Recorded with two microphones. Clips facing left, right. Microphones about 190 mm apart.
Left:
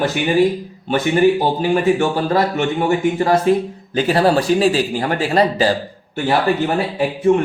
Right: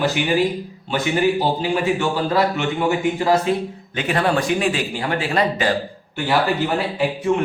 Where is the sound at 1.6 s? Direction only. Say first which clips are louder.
Left 5 dB; 45° left (ahead or behind).